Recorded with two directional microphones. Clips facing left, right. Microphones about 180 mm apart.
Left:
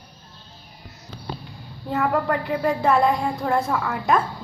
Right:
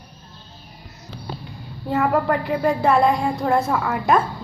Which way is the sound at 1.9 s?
10° right (ahead or behind).